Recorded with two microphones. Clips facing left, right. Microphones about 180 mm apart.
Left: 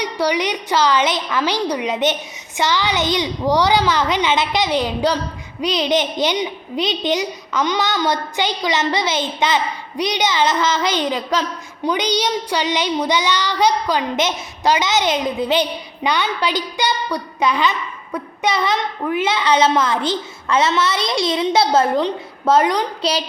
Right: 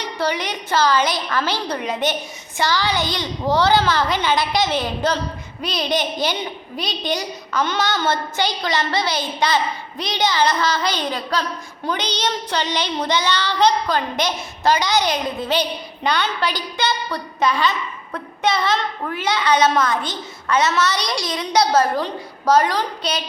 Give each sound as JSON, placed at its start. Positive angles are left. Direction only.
{"t": 0.0, "sound": "a woman's voice", "side_deg": 15}